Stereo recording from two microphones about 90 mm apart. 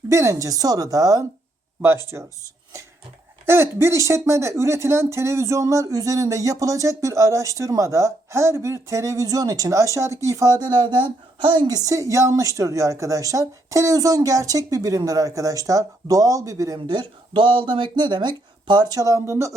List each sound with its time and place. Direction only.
0.1 s a woman's voice: 35° right (ahead or behind)
3.4 s a woman's voice: 30° right (ahead or behind)
10.6 s speech: 55° right (ahead or behind)
11.7 s a woman's voice: 35° right (ahead or behind); by 18.9 s 55° right (ahead or behind)
18.9 s a woman's voice: 35° right (ahead or behind)